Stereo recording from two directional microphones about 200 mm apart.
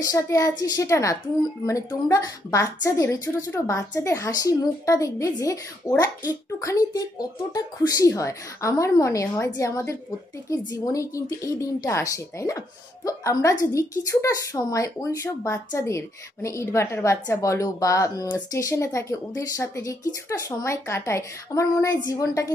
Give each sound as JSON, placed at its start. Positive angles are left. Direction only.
{"t": 0.0, "sound": "a woman's voice", "side_deg": 15}